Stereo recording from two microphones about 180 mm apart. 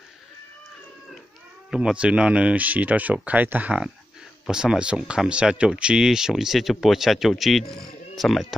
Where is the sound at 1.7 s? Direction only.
5° right (ahead or behind).